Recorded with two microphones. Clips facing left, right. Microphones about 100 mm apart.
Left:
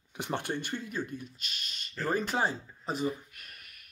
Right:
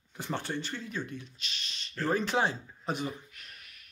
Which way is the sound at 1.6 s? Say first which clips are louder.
Even; 50° left (ahead or behind).